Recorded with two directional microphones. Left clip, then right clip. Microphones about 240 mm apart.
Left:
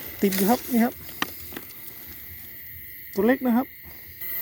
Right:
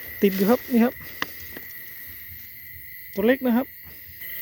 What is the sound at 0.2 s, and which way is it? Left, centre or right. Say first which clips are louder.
Speech: right 2 dB; centre.